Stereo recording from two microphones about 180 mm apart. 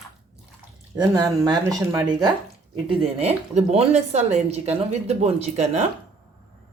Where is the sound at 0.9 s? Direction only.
20° right (ahead or behind).